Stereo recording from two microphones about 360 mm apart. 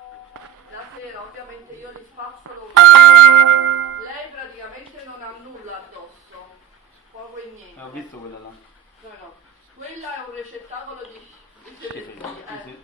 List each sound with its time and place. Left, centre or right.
2.7 s music: right